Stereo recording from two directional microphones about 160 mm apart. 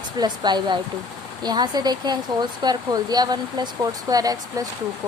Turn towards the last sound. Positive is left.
turn(degrees=-25)  # may be behind; listen again after turning